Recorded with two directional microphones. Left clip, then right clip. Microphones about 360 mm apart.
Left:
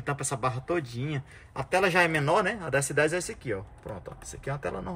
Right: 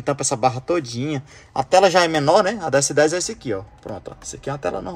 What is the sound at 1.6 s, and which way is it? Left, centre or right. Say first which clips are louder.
Speech: right 11 dB; right.